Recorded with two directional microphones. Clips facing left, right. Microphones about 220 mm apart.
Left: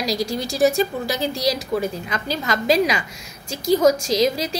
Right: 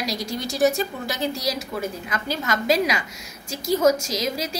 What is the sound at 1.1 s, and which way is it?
Speech, 35° left (ahead or behind).